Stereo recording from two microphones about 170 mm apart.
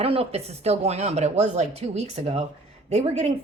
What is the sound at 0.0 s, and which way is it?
A woman's voice, 35° right (ahead or behind).